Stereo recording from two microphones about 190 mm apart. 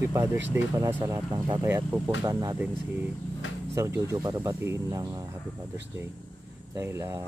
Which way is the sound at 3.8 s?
15° right (ahead or behind).